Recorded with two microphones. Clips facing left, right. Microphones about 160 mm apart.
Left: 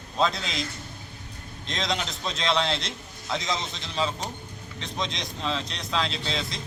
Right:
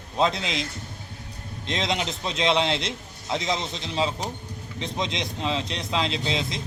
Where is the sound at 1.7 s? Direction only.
25° right (ahead or behind).